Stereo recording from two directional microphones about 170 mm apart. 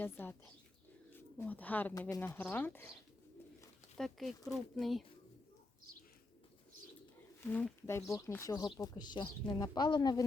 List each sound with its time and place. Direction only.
0.0 s speech: 10° left (ahead or behind)
2.0 s speech: 20° left (ahead or behind)
3.9 s speech: centre (ahead or behind)
7.4 s speech: 10° left (ahead or behind)